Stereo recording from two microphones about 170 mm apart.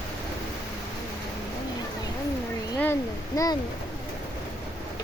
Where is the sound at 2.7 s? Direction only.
10° left (ahead or behind).